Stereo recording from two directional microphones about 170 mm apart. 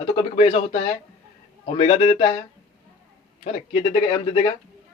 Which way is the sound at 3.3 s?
35° left (ahead or behind).